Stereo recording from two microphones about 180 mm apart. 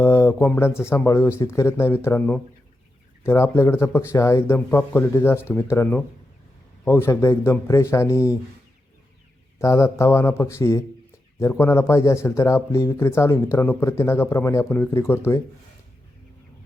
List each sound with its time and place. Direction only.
0.0 s speech: 15° left (ahead or behind)
9.6 s speech: 15° left (ahead or behind)